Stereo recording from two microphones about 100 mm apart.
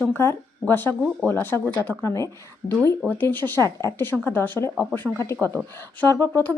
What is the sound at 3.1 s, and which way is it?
Speech, 20° left (ahead or behind).